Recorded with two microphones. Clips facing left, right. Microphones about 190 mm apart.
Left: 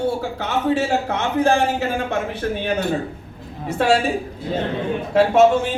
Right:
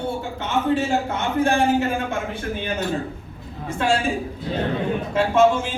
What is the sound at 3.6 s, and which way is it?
Speech, 65° left (ahead or behind).